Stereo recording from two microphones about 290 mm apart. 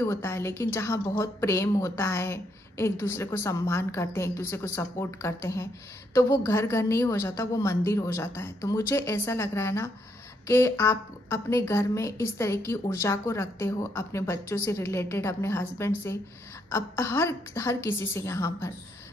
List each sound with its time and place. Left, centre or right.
0.0 s a woman's voice: centre